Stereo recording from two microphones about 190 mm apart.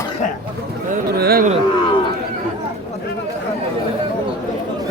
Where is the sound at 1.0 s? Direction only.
55° right (ahead or behind).